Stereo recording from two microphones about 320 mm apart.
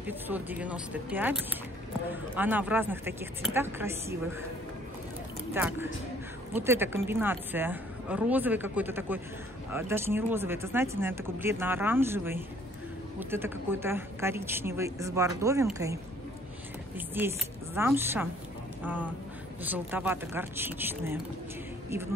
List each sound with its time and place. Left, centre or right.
0.0 s speech: centre
5.5 s speech: centre